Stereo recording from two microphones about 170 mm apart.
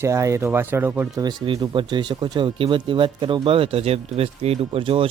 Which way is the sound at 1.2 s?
25° right (ahead or behind).